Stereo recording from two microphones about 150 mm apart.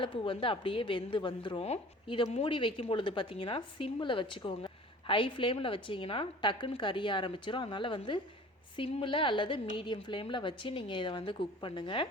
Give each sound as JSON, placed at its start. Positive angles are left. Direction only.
{"t": 0.0, "sound": "a woman's voice", "side_deg": 35}